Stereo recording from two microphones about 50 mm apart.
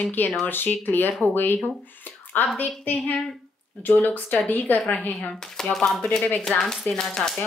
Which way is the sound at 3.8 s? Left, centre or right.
Left.